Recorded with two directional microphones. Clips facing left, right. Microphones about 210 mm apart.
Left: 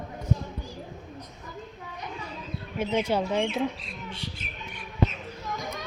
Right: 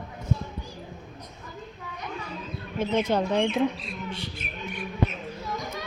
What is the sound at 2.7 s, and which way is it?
Speech, 10° left (ahead or behind).